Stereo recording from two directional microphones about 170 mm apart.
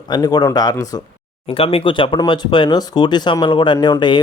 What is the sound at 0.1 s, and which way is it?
Speech, 25° left (ahead or behind).